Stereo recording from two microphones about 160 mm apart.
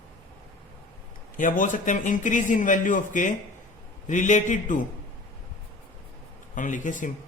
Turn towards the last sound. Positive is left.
turn(degrees=50)  # may be behind; listen again after turning